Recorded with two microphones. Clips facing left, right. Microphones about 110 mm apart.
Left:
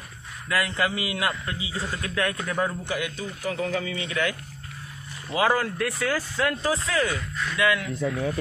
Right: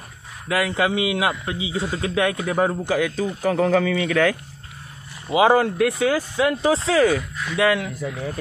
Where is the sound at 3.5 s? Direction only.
90° right.